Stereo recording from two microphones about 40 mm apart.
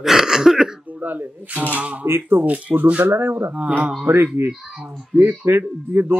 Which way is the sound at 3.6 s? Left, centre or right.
Right.